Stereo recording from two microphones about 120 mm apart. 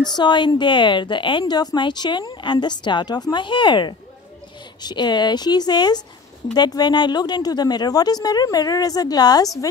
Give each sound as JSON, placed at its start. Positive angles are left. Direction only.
{"t": 0.1, "sound": "speech", "side_deg": 40}